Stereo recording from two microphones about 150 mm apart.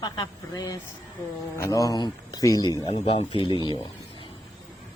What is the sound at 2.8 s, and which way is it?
Speech, 45° left (ahead or behind).